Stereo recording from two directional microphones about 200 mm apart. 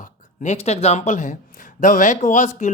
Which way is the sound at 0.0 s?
40° left (ahead or behind).